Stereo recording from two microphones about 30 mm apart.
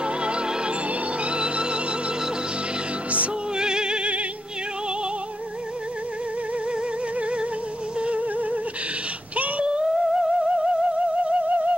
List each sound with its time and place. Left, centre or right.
0.0 s music: right
3.5 s music: right
7.2 s music: right
9.9 s music: centre
11.0 s music: right
11.4 s music: right